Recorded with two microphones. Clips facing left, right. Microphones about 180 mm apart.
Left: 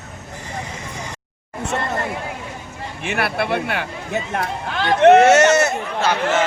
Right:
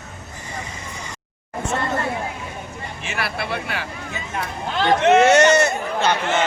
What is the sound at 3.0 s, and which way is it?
Speech, 55° left (ahead or behind).